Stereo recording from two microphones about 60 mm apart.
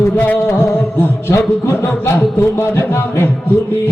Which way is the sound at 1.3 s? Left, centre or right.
Left.